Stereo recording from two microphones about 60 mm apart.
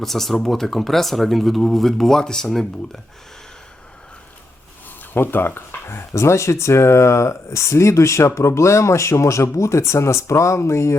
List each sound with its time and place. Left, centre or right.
0.0 s speech: centre
5.1 s speech: left